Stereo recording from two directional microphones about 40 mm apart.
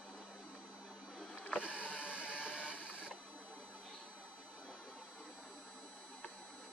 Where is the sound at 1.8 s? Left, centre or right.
Left.